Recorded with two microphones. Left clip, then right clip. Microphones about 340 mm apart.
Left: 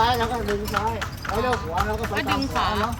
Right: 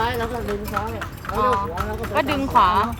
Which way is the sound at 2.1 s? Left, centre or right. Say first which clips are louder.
Right 5 dB; centre.